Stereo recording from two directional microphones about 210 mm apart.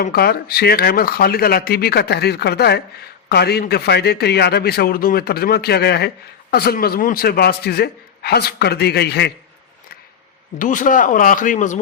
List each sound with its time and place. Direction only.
0.0 s a man's voice: 45° left (ahead or behind)
10.6 s speech: 40° left (ahead or behind)